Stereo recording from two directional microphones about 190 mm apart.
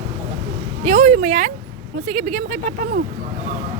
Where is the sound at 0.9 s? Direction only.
45° right (ahead or behind).